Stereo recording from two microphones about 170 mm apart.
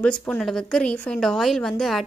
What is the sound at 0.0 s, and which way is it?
Speech, 5° left (ahead or behind).